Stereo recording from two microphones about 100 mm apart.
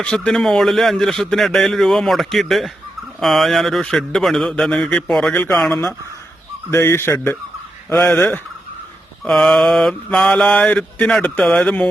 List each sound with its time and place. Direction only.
0.0 s a man's voice: 10° left (ahead or behind)
5.3 s a man's voice: 25° left (ahead or behind)
6.7 s a man's voice: 25° left (ahead or behind)
8.1 s mantra: 15° left (ahead or behind)